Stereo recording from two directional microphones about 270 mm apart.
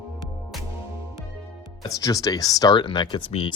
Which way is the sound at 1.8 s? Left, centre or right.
Centre.